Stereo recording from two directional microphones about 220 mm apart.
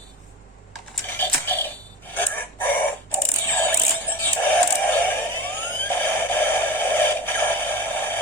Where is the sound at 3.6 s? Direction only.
10° left (ahead or behind).